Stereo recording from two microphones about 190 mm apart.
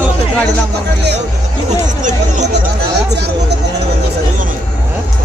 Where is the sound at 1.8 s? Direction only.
40° right (ahead or behind).